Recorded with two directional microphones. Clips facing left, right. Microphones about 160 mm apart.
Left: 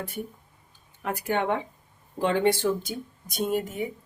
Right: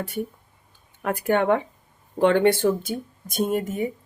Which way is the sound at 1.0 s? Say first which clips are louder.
Right 6 dB; 55° right (ahead or behind).